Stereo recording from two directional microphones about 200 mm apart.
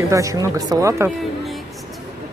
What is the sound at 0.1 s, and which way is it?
Speech, 15° right (ahead or behind).